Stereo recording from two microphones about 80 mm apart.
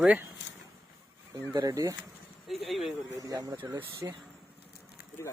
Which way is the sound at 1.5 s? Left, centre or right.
Right.